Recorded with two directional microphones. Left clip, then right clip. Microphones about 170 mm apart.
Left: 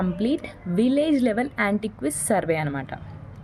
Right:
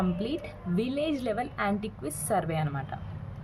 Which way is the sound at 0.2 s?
40° left (ahead or behind).